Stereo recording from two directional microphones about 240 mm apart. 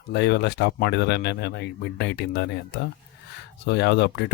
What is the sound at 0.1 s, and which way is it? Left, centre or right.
Speech, left.